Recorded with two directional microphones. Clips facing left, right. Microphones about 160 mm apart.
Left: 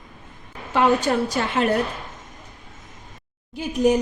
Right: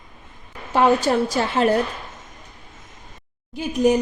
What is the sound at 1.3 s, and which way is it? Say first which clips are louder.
Speech: right 2 dB; 35° right (ahead or behind).